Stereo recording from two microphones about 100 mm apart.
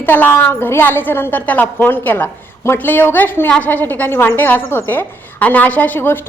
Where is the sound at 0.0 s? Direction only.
20° left (ahead or behind).